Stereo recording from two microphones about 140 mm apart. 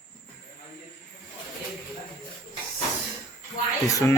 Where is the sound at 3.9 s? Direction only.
25° left (ahead or behind).